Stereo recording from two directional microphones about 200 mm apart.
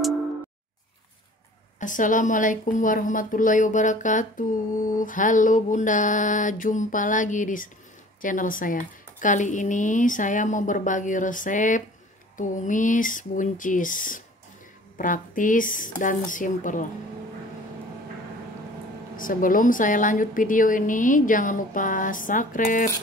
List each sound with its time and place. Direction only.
1.8 s a woman's voice: 40° left (ahead or behind)
19.1 s a woman's voice: 45° left (ahead or behind)